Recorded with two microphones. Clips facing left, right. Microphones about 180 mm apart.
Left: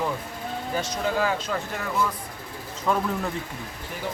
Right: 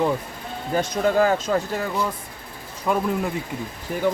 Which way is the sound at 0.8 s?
50° right (ahead or behind).